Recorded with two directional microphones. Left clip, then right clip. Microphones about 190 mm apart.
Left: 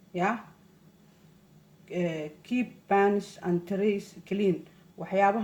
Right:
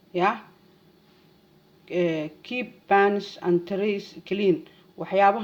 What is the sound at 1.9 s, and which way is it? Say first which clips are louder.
Speech: right 7 dB; 40° right (ahead or behind).